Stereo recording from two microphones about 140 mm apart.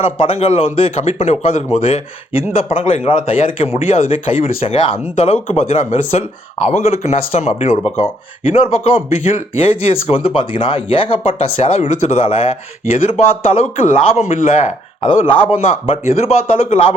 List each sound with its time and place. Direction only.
0.2 s speech: 45° left (ahead or behind)
5.1 s speech: 55° left (ahead or behind)
15.0 s speech: 40° left (ahead or behind)